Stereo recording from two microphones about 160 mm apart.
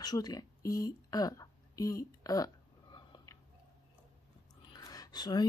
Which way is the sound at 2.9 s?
25° left (ahead or behind).